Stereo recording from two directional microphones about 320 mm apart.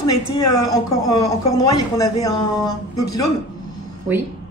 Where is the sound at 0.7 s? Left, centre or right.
Left.